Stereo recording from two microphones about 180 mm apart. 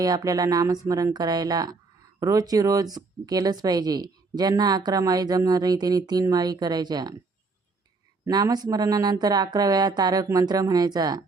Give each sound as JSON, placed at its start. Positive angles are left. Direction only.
{"t": 0.0, "sound": "a woman's voice", "side_deg": -20}
{"t": 8.2, "sound": "a woman's voice", "side_deg": -20}